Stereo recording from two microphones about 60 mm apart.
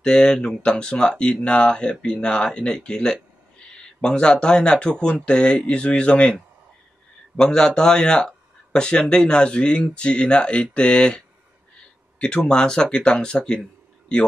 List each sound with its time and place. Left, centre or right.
0.0 s speech: centre